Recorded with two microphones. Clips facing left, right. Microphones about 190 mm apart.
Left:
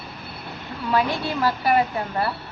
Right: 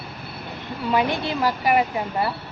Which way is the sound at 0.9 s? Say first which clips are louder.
Even; 20° right (ahead or behind).